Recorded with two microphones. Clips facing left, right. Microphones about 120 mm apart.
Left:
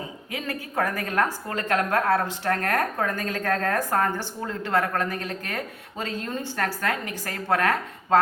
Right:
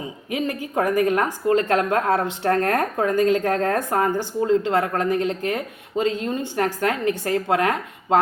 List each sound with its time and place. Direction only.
0.3 s a woman's voice: 20° right (ahead or behind)